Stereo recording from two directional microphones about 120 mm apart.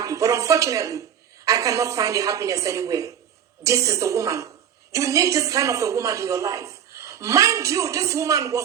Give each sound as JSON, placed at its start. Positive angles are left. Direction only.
{"t": 0.0, "sound": "a woman's voice", "side_deg": -25}